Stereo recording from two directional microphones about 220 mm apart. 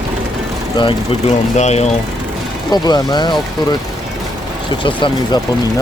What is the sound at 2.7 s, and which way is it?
Speech, 20° left (ahead or behind).